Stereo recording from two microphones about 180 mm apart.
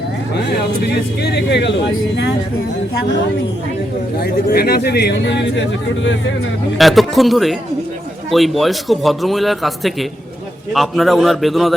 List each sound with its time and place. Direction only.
1.2 s speech: 70° left (ahead or behind)
4.2 s speech: 60° left (ahead or behind); by 6.1 s 90° left
6.7 s a man's voice: centre (ahead or behind)